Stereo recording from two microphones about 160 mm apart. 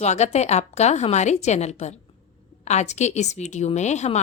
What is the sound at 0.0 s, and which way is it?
A woman's voice, 45° left (ahead or behind).